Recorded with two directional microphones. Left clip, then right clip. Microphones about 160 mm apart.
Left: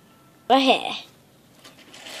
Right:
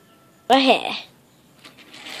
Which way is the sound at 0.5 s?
10° right (ahead or behind).